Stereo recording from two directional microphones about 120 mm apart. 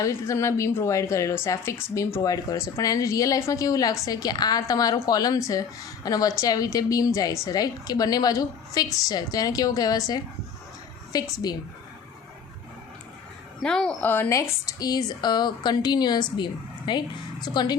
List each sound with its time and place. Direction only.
0.0 s a woman's voice: 25° left (ahead or behind)
13.6 s a woman's voice: 5° left (ahead or behind)
14.1 s a woman's voice: 20° left (ahead or behind); by 17.7 s 35° left (ahead or behind)